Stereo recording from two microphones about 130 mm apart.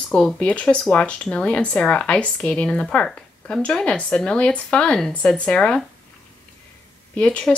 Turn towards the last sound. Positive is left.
turn(degrees=10)  # may be behind; listen again after turning